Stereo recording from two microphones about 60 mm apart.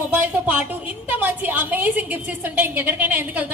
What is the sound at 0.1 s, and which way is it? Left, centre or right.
A woman's voice, right.